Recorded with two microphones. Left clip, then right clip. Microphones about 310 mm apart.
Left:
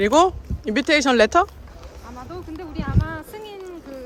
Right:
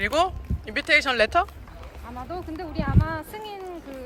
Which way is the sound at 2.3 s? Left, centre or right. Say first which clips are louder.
Right 1 dB; centre.